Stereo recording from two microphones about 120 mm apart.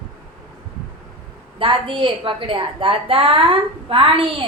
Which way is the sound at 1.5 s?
45° right (ahead or behind).